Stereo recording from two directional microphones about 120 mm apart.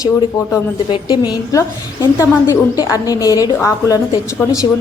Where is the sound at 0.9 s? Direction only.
45° left (ahead or behind).